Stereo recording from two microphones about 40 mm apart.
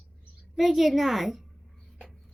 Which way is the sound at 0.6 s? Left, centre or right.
Centre.